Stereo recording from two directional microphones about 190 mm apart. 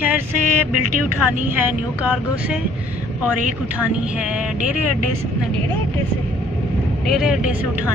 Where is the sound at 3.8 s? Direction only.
5° right (ahead or behind).